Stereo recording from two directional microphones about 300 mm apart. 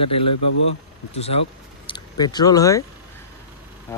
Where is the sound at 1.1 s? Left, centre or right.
Left.